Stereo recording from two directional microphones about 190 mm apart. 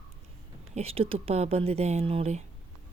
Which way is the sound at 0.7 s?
30° right (ahead or behind).